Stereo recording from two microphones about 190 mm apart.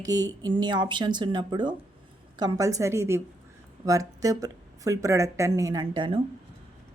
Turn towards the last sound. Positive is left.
turn(degrees=-25)  # may be behind; listen again after turning